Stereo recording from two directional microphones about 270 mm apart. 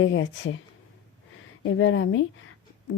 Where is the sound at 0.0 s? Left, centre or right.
Left.